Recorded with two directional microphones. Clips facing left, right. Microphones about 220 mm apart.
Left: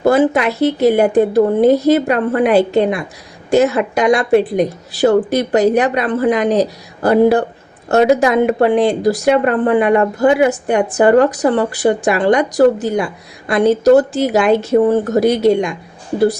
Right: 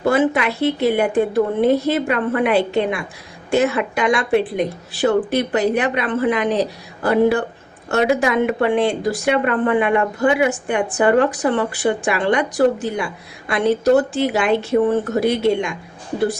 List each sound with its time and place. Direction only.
0.0 s speech: 40° left (ahead or behind)